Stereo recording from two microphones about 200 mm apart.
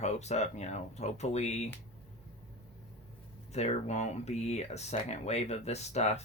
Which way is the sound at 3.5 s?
35° left (ahead or behind).